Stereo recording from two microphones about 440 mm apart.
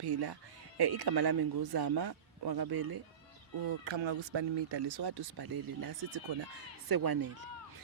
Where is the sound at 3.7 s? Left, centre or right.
Right.